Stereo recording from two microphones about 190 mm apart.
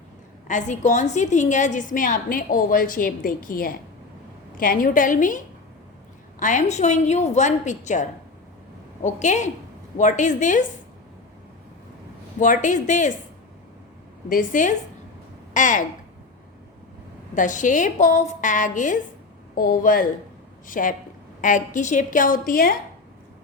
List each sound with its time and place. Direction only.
0.4 s a woman's voice: 40° left (ahead or behind)
6.4 s a woman's voice: 40° left (ahead or behind)
9.0 s a woman's voice: 40° left (ahead or behind)
12.4 s a woman's voice: 40° left (ahead or behind)
14.3 s a woman's voice: 45° left (ahead or behind)
17.3 s a woman's voice: 40° left (ahead or behind)